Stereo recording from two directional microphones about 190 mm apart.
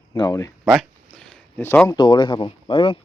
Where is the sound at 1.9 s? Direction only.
20° left (ahead or behind).